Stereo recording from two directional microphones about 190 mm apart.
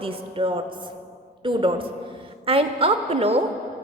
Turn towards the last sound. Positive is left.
turn(degrees=-35)  # may be behind; listen again after turning